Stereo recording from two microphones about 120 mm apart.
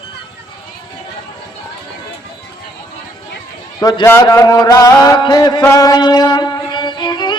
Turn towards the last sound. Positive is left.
turn(degrees=40)  # may be behind; listen again after turning